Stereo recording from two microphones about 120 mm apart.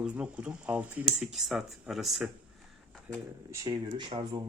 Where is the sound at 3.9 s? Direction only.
40° right (ahead or behind).